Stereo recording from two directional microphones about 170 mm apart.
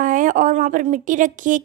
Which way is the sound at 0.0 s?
50° right (ahead or behind).